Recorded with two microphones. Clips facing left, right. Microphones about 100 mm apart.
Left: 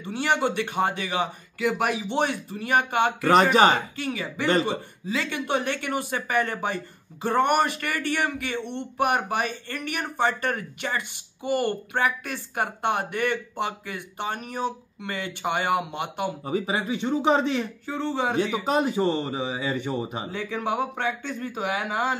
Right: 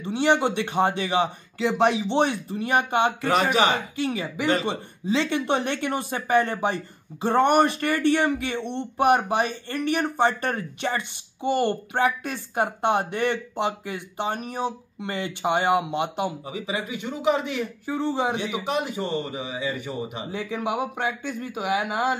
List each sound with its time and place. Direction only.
0.0 s speech: 20° right (ahead or behind)
16.4 s a man's voice: 35° left (ahead or behind)
17.8 s speech: 15° right (ahead or behind)
18.8 s a man's voice: 30° left (ahead or behind)
20.3 s speech: 15° right (ahead or behind)